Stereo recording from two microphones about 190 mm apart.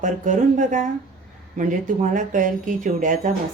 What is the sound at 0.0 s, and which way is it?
A woman's voice, 40° right (ahead or behind).